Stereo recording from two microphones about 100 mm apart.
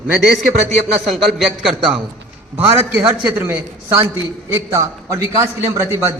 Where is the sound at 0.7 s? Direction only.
Centre (ahead or behind).